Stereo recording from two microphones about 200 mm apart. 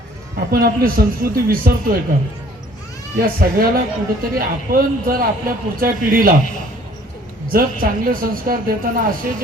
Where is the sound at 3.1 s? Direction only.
45° right (ahead or behind).